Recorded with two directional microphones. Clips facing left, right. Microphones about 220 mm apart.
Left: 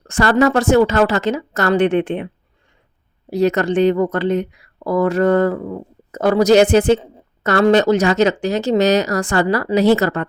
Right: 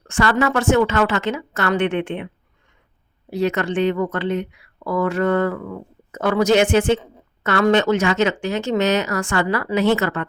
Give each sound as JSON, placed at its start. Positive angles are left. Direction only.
{"t": 0.1, "sound": "speech", "side_deg": 40}